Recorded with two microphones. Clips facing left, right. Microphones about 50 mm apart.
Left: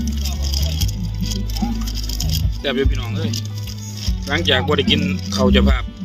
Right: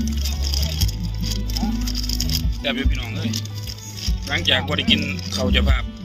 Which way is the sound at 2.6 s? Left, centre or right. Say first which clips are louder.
Left 5 dB; centre.